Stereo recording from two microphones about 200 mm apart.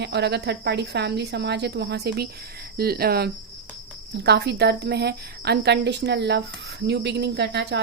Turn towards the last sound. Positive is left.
turn(degrees=-55)  # may be behind; listen again after turning